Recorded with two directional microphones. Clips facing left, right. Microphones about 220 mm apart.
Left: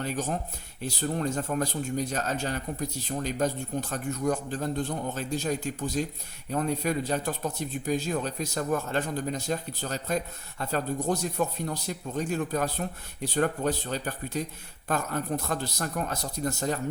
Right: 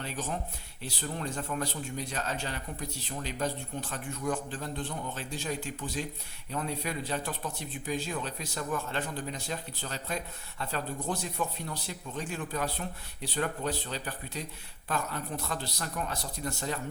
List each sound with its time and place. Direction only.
0.0 s a man's voice: 45° left (ahead or behind)